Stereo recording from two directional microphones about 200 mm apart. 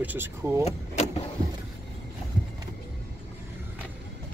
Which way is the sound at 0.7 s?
35° left (ahead or behind).